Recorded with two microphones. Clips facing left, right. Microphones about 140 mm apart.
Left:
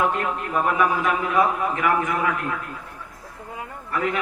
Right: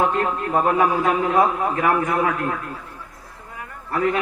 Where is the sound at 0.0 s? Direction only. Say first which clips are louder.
Right 3 dB; 40° right (ahead or behind).